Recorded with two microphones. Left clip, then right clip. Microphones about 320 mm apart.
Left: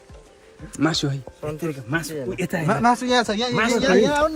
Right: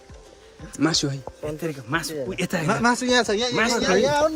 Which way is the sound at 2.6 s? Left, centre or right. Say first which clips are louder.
Left 2 dB; right.